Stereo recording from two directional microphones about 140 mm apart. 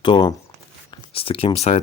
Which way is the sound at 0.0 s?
35° left (ahead or behind).